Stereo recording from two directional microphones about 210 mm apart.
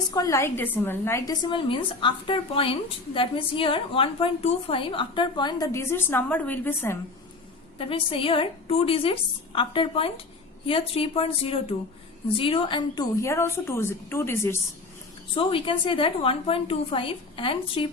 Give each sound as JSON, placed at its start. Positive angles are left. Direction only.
{"t": 0.1, "sound": "a woman's voice", "side_deg": 15}
{"t": 7.8, "sound": "a woman's voice", "side_deg": 25}
{"t": 15.4, "sound": "a woman's voice", "side_deg": 25}